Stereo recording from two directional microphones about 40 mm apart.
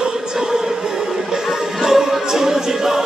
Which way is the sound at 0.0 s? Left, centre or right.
Centre.